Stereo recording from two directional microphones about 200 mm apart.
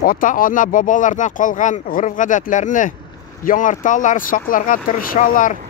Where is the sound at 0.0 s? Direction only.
45° left (ahead or behind).